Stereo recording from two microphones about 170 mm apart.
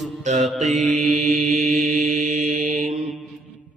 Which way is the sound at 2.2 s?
45° right (ahead or behind).